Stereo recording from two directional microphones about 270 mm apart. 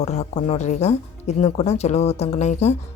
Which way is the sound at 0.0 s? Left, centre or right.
Left.